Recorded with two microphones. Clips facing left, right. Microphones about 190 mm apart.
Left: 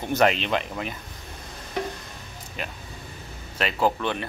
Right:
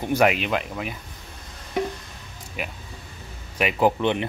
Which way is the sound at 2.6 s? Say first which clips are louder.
Right 2 dB; 10° right (ahead or behind).